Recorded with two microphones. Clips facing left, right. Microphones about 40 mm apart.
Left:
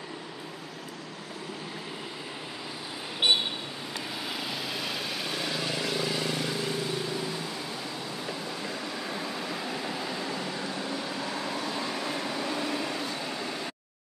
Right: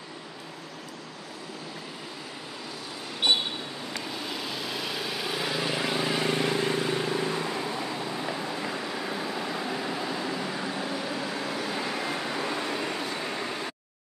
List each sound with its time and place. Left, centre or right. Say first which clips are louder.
3.2 s vehicle: even; left
4.1 s vehicle: left 1 dB; centre